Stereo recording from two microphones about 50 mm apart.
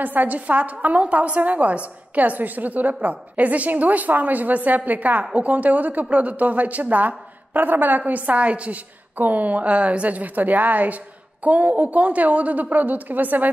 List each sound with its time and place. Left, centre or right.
0.0 s a woman's voice: right